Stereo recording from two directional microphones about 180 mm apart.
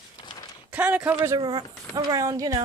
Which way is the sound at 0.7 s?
5° right (ahead or behind).